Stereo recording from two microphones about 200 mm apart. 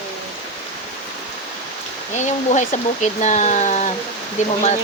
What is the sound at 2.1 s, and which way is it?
Speech, 35° left (ahead or behind).